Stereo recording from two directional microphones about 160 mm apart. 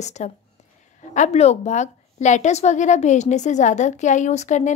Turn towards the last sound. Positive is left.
turn(degrees=45)  # may be behind; listen again after turning